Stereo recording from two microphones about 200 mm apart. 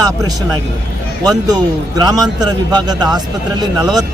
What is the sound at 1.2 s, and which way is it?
Speech, 20° right (ahead or behind).